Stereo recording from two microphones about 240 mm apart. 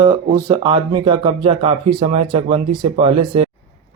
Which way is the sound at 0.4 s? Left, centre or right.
Centre.